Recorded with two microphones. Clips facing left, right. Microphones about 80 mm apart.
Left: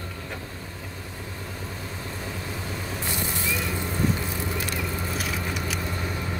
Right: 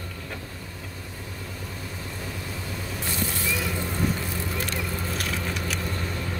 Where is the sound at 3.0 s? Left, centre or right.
Centre.